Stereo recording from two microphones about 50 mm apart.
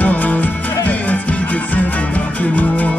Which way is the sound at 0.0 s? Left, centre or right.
Left.